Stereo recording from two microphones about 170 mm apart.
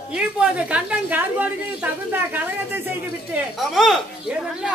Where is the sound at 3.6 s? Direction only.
Centre (ahead or behind).